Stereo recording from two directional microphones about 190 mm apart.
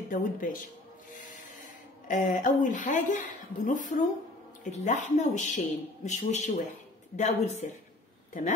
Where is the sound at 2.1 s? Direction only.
40° left (ahead or behind).